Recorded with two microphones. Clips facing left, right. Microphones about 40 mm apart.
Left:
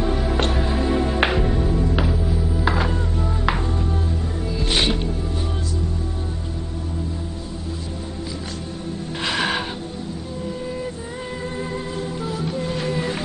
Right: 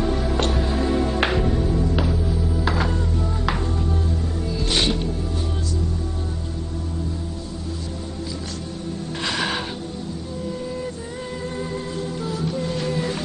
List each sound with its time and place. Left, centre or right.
0.0 s music: centre
9.2 s music: centre
11.7 s music: centre